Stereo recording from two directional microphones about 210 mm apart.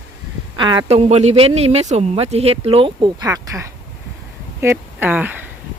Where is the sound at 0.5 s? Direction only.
20° right (ahead or behind).